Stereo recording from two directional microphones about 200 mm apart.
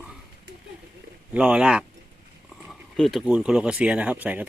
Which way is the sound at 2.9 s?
Centre (ahead or behind).